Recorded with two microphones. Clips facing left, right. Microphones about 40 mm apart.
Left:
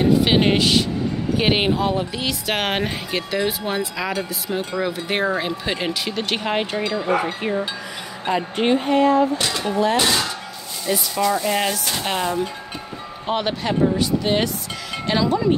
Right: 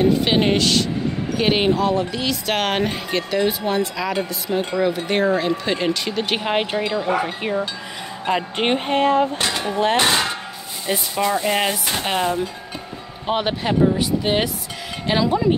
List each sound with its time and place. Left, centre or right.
0.0 s speech: centre
6.3 s speech: centre
8.3 s speech: right
10.9 s speech: right
13.3 s speech: centre